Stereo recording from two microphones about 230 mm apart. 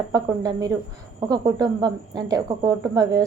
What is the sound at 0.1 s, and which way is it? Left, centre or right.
Speech, centre.